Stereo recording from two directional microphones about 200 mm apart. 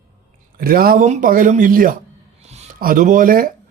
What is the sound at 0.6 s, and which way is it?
Speech, 50° right (ahead or behind).